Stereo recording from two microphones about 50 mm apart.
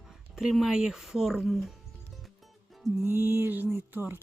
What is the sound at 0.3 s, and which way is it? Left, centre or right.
Speech, centre.